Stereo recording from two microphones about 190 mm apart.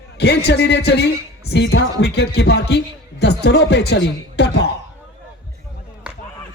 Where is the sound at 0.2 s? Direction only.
60° left (ahead or behind).